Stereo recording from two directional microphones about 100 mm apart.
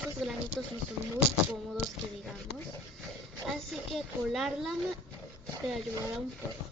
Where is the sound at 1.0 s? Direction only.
30° right (ahead or behind).